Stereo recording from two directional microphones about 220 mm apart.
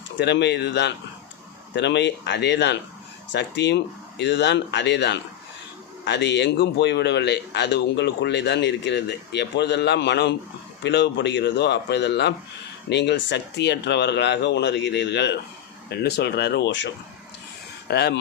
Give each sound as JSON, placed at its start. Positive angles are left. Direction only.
{"t": 0.2, "sound": "a man's voice", "side_deg": 50}